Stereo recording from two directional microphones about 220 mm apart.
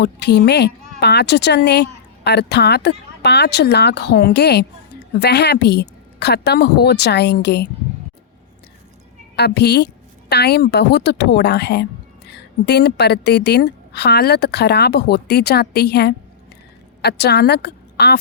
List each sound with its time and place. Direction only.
0.0 s a woman's voice: 50° left (ahead or behind)
9.3 s a woman's voice: 50° left (ahead or behind)